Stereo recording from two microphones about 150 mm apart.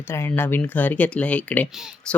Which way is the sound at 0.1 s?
15° left (ahead or behind).